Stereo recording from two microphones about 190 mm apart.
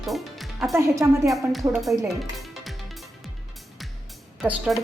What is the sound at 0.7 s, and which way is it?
Speech, 15° right (ahead or behind).